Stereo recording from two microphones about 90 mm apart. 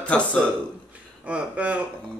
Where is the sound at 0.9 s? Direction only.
15° right (ahead or behind).